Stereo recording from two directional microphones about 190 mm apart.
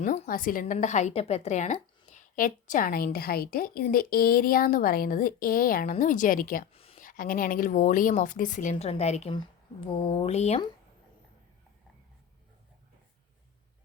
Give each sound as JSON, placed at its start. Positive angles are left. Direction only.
{"t": 0.0, "sound": "a woman's voice", "side_deg": 45}
{"t": 6.7, "sound": "a sound", "side_deg": 30}
{"t": 7.0, "sound": "a woman's voice", "side_deg": 45}